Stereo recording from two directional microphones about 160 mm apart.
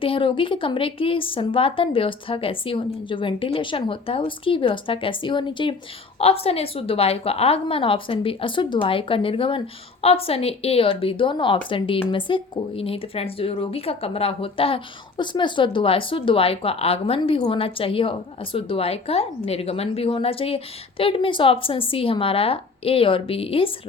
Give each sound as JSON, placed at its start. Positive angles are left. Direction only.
{"t": 0.0, "sound": "a woman's voice", "side_deg": 35}